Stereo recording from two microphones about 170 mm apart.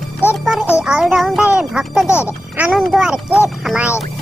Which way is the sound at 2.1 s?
15° left (ahead or behind).